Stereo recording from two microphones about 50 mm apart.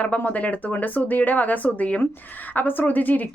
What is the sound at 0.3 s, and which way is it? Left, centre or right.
Speech, left.